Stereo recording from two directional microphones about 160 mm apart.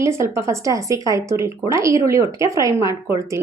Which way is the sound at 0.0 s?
20° right (ahead or behind).